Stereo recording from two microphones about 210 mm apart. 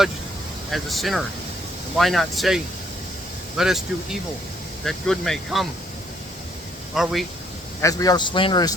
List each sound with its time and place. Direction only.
0.7 s speech: centre (ahead or behind)
3.6 s speech: centre (ahead or behind)
6.9 s speech: centre (ahead or behind)
7.8 s speech: 15° left (ahead or behind)